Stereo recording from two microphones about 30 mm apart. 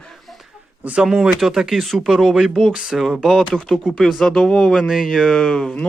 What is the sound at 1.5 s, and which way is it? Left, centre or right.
Speech, centre.